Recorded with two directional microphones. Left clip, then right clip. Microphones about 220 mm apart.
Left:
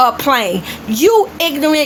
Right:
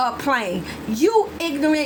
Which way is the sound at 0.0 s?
25° left (ahead or behind).